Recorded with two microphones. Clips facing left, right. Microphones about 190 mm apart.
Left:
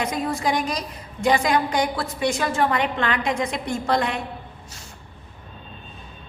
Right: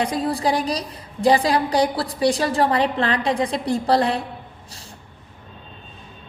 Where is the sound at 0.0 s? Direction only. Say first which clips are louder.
Right 3 dB; 35° right (ahead or behind).